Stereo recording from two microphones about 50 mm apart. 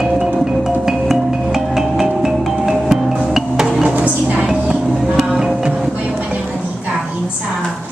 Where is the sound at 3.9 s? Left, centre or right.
Right.